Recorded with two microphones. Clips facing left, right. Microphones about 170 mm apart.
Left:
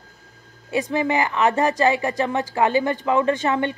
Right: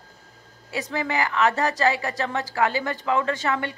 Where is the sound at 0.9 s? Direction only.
20° left (ahead or behind).